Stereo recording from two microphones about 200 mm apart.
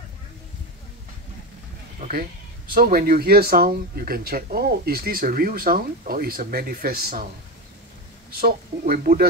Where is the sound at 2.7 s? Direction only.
45° right (ahead or behind).